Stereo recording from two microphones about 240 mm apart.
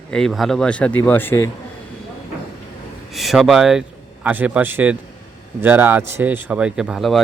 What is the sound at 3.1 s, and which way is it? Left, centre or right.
A man's voice, centre.